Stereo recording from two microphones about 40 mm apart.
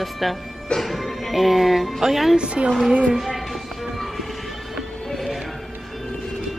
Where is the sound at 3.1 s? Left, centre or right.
Centre.